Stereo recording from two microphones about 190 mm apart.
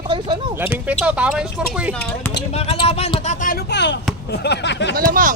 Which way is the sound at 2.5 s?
35° left (ahead or behind).